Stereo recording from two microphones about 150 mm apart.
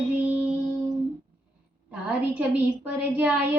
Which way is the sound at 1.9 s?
10° right (ahead or behind).